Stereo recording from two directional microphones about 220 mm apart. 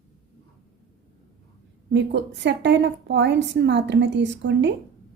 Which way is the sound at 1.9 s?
55° right (ahead or behind).